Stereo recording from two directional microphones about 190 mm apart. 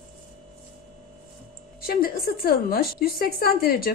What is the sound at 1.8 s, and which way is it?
A woman's voice, 50° left (ahead or behind).